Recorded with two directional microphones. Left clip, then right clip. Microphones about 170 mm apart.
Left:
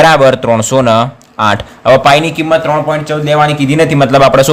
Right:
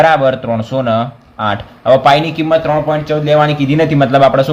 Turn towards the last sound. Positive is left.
turn(degrees=40)  # may be behind; listen again after turning